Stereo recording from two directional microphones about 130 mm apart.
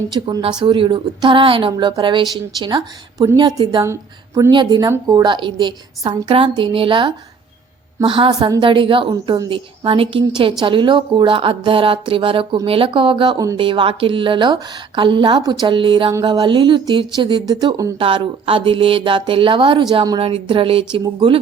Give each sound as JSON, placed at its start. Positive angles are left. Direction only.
{"t": 0.1, "sound": "a woman's voice", "side_deg": -30}
{"t": 18.0, "sound": "a woman's voice", "side_deg": -45}